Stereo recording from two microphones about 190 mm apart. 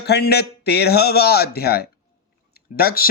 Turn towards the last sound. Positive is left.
turn(degrees=55)  # may be behind; listen again after turning